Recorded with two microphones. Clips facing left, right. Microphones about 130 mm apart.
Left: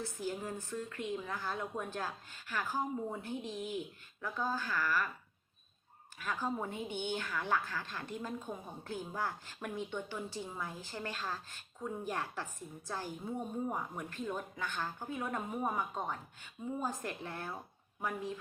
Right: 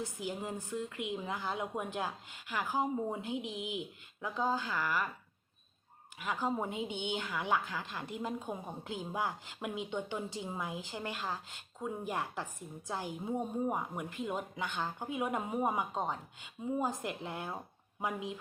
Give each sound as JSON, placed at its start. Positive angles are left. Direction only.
{"t": 0.0, "sound": "a woman's voice", "side_deg": -15}
{"t": 6.1, "sound": "a woman's voice", "side_deg": -15}